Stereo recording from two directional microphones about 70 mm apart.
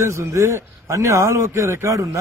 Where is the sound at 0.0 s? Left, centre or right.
Right.